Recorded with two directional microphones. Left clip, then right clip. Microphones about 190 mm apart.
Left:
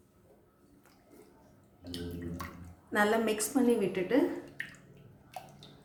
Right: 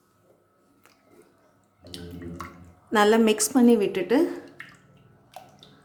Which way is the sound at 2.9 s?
50° right (ahead or behind).